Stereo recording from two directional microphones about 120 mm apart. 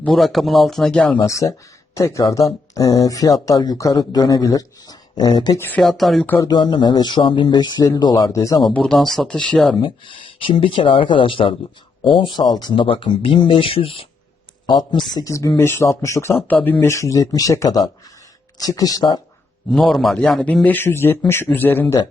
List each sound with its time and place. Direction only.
0.0 s speech: 5° left (ahead or behind)
1.2 s speech: 25° left (ahead or behind)
5.5 s speech: 15° left (ahead or behind)
5.8 s speech: centre (ahead or behind)
6.2 s speech: 20° left (ahead or behind)
6.5 s speech: 40° left (ahead or behind)
8.7 s speech: 5° left (ahead or behind)
9.8 s speech: 45° left (ahead or behind)
12.4 s speech: 35° left (ahead or behind); by 14.1 s 50° left (ahead or behind)
14.7 s speech: 35° left (ahead or behind)
19.7 s speech: centre (ahead or behind)
20.7 s speech: 15° left (ahead or behind)